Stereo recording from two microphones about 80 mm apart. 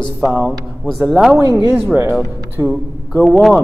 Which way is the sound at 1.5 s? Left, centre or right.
Right.